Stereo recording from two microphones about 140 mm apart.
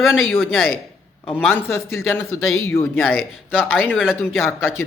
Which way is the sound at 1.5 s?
15° left (ahead or behind).